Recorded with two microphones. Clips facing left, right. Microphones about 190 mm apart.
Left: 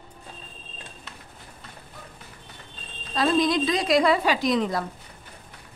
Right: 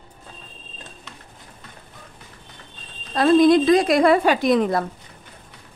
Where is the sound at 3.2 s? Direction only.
55° right (ahead or behind).